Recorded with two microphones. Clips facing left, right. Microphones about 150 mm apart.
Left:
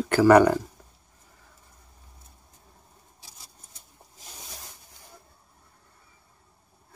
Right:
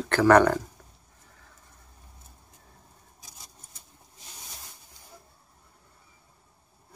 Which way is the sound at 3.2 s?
30° left (ahead or behind).